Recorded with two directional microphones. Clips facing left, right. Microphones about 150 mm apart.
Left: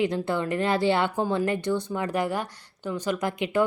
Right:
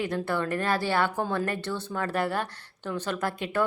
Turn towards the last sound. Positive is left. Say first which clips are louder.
# left 3 dB
turn(degrees=15)  # may be behind; listen again after turning